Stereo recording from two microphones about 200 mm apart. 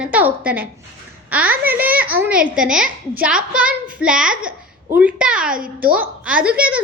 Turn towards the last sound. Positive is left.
turn(degrees=-5)  # may be behind; listen again after turning